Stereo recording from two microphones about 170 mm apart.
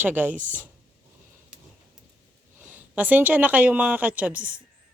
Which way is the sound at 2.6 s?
10° right (ahead or behind).